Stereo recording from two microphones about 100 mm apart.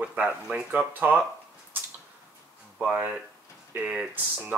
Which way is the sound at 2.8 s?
15° right (ahead or behind).